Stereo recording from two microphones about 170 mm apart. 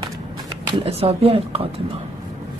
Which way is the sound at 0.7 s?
35° right (ahead or behind).